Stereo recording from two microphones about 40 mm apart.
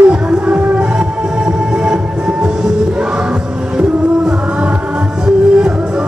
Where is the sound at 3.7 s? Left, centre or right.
Right.